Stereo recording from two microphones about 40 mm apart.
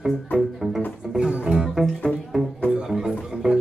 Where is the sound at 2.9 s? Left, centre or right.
Centre.